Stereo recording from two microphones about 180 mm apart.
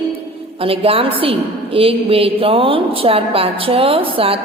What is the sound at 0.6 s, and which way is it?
A woman's voice, 30° right (ahead or behind).